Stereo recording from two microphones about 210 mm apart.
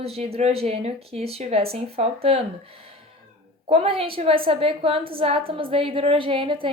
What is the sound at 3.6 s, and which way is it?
Speech, 30° right (ahead or behind).